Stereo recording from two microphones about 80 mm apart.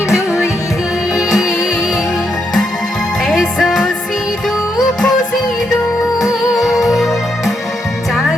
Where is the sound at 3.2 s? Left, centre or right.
Centre.